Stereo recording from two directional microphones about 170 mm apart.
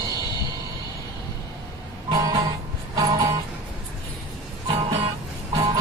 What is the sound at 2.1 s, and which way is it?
Music, 20° right (ahead or behind).